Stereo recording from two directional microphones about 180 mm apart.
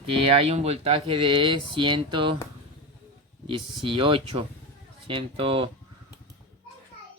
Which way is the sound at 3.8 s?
30° right (ahead or behind).